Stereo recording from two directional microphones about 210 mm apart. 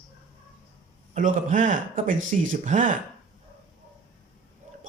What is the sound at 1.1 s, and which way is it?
Speech, 35° right (ahead or behind).